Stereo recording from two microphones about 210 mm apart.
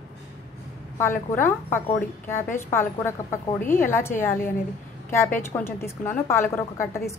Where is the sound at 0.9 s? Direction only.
10° left (ahead or behind).